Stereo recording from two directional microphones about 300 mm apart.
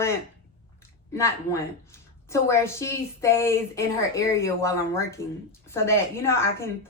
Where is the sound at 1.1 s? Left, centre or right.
Centre.